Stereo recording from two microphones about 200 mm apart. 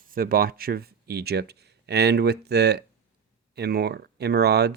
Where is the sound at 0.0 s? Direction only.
45° right (ahead or behind).